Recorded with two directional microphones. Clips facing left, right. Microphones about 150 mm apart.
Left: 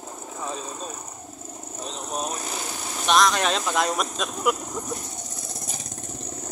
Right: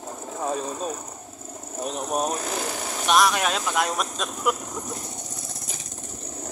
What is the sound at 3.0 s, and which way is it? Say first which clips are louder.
Speech: even; 10° right (ahead or behind).